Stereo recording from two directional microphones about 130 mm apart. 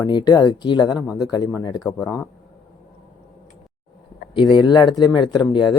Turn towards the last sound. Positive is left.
turn(degrees=30)  # may be behind; listen again after turning